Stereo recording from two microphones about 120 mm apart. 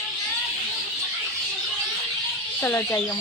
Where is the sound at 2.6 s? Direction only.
20° left (ahead or behind).